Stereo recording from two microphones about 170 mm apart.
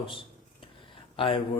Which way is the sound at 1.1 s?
30° left (ahead or behind).